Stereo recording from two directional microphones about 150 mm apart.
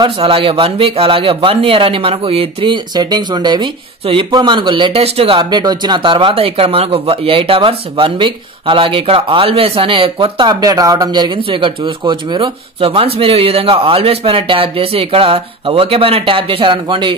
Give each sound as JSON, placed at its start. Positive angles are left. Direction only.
{"t": 0.0, "sound": "speech", "side_deg": -35}